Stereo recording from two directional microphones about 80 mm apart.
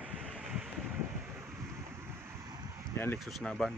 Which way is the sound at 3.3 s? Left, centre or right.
Centre.